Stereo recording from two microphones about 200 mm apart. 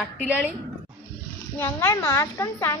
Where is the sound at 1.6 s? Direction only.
10° left (ahead or behind).